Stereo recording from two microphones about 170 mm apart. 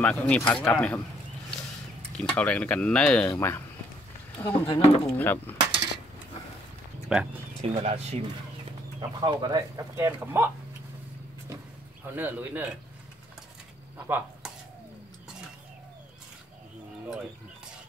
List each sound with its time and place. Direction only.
0.0 s speech: 10° left (ahead or behind)
2.1 s speech: 5° left (ahead or behind)
4.5 s speech: 30° left (ahead or behind)
5.1 s speech: 10° left (ahead or behind)
7.1 s speech: 5° right (ahead or behind)
7.6 s speech: 40° right (ahead or behind)
9.2 s speech: 25° right (ahead or behind)
9.9 s a man's voice: 15° right (ahead or behind)
12.0 s a man's voice: 10° right (ahead or behind)
13.9 s speech: 10° right (ahead or behind)